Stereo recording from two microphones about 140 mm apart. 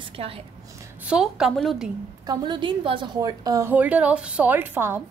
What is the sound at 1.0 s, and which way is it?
Speech, 5° right (ahead or behind).